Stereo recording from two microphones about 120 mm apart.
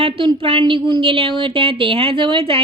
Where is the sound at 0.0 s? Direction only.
50° right (ahead or behind).